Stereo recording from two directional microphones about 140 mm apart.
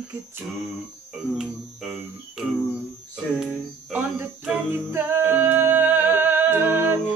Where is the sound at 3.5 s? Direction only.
15° right (ahead or behind).